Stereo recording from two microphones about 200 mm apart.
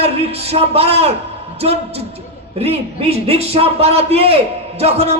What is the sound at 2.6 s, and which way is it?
A man's voice, 30° right (ahead or behind).